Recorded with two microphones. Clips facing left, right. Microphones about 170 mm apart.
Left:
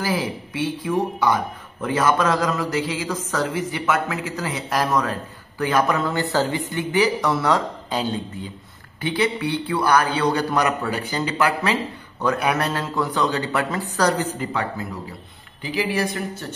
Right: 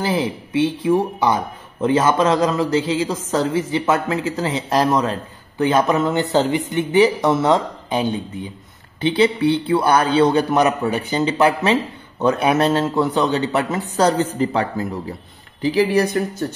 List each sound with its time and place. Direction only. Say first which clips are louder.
0.0 s speech: right 3 dB; 25° right (ahead or behind)